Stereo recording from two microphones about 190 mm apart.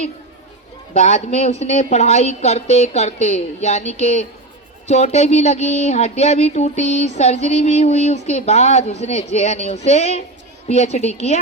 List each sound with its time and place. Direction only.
0.9 s a woman's voice: 35° left (ahead or behind)